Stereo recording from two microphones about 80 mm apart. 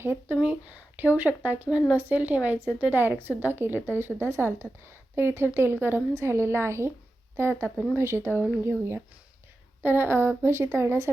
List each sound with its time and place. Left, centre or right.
0.0 s a woman's voice: right